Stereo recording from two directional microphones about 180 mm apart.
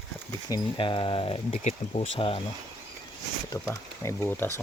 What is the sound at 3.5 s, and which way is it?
Speech, 15° left (ahead or behind).